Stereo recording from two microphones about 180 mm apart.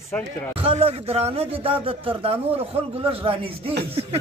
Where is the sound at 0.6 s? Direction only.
35° right (ahead or behind).